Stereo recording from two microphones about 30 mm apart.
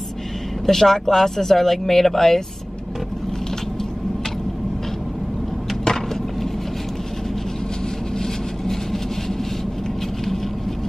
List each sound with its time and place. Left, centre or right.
0.7 s speech: centre